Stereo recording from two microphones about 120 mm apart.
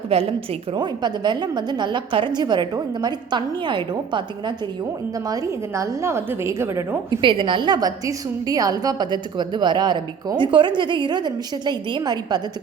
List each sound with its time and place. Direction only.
0.1 s a woman's voice: 50° right (ahead or behind); by 7.2 s 25° right (ahead or behind)
7.2 s a woman's voice: 45° right (ahead or behind)